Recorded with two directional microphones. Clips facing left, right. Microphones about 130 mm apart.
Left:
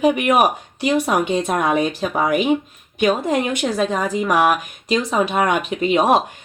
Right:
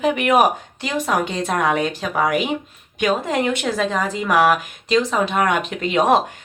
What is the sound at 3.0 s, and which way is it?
Speech, 20° left (ahead or behind).